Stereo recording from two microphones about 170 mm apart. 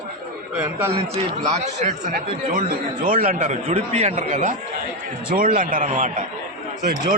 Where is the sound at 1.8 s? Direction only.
50° right (ahead or behind).